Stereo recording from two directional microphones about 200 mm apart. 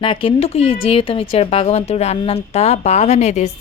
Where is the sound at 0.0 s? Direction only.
25° left (ahead or behind).